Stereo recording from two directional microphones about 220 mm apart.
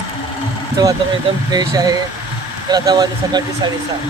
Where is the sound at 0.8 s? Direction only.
15° right (ahead or behind).